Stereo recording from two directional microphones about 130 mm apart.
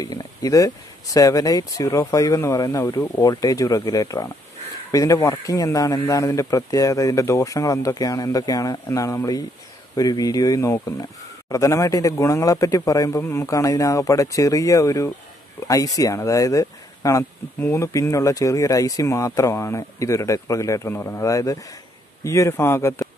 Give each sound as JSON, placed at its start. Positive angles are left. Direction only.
{"t": 0.0, "sound": "speech", "side_deg": 25}